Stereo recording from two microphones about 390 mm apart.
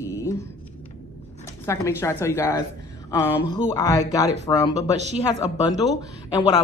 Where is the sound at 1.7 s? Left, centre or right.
Centre.